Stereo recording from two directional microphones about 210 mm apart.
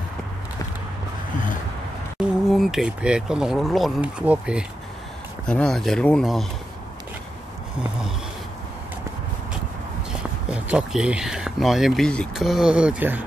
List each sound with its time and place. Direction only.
2.1 s speech: centre (ahead or behind)
10.5 s speech: 5° right (ahead or behind)